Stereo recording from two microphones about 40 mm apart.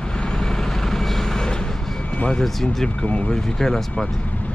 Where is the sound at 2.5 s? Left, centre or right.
Centre.